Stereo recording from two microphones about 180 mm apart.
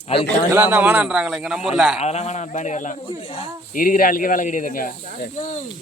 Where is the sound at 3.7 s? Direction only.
50° left (ahead or behind).